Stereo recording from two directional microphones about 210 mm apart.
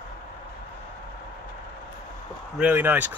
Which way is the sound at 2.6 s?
10° right (ahead or behind).